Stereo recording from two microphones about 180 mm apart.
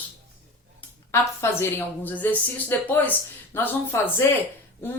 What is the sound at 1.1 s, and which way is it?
Speech, 15° left (ahead or behind).